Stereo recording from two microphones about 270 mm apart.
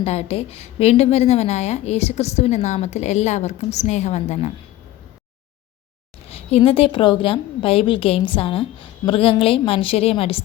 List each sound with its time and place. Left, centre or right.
0.0 s a woman's voice: left
6.2 s a sound: left
6.7 s a woman's voice: centre